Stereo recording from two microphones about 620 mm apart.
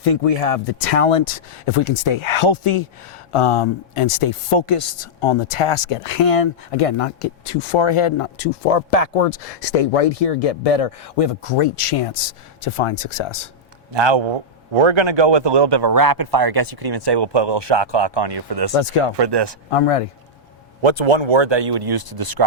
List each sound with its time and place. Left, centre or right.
0.0 s speech: left
13.9 s a man's voice: right
18.7 s speech: left
19.1 s a man's voice: right
19.7 s speech: left
20.8 s a man's voice: right